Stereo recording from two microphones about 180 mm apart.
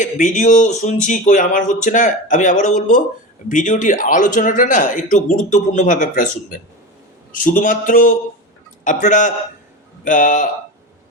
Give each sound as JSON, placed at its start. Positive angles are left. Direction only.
{"t": 0.0, "sound": "speech", "side_deg": 45}